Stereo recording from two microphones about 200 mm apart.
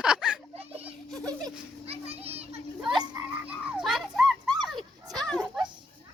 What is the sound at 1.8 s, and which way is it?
Children playing, 30° right (ahead or behind).